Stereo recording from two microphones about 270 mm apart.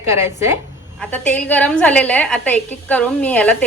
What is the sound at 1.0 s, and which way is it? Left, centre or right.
A woman's voice, centre.